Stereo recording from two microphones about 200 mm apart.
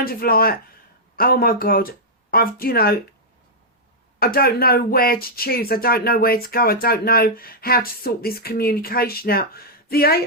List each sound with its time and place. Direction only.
0.0 s speech: 50° left (ahead or behind)
4.2 s speech: 50° left (ahead or behind)